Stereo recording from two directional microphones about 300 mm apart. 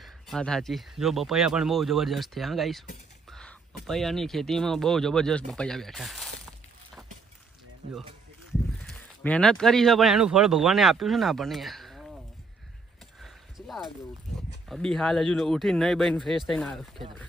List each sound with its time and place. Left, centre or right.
0.0 s speech: centre
3.2 s a sound: centre
3.8 s speech: centre
8.8 s speech: centre
13.1 s a sound: centre
14.7 s speech: centre